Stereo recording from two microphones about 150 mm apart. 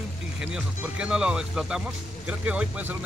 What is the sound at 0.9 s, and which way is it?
Speech, 5° right (ahead or behind).